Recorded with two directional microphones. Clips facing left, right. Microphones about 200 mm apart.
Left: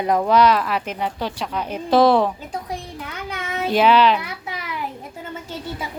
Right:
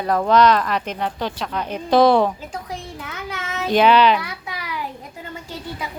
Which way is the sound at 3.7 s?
5° left (ahead or behind).